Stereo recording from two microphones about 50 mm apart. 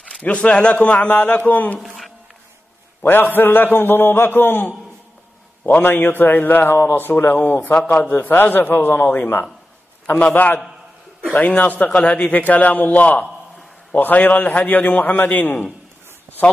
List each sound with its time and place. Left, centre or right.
0.2 s speech: left
1.8 s a sound: centre
3.0 s a man's voice: left
8.2 s a man's voice: left